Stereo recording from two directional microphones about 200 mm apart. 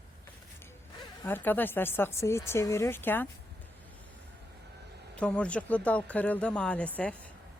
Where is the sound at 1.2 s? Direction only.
10° left (ahead or behind).